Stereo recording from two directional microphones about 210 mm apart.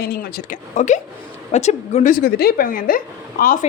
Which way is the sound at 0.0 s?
50° left (ahead or behind).